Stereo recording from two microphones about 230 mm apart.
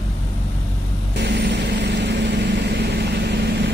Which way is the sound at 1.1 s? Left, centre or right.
Right.